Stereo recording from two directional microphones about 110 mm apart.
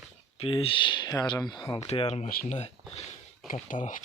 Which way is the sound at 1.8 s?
70° left (ahead or behind).